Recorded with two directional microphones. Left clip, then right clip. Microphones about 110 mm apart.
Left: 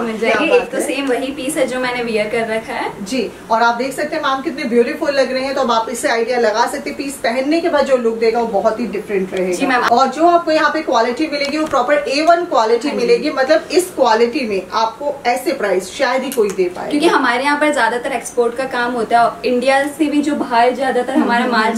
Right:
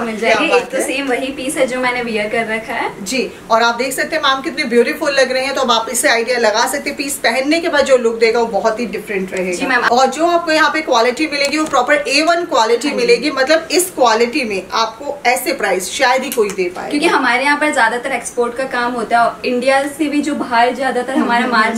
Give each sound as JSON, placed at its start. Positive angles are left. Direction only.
{"t": 0.2, "sound": "a woman's voice", "side_deg": 0}
{"t": 3.4, "sound": "speech", "side_deg": -15}
{"t": 9.6, "sound": "a woman's voice", "side_deg": 15}
{"t": 9.9, "sound": "speech", "side_deg": -15}
{"t": 16.9, "sound": "a woman's voice", "side_deg": 0}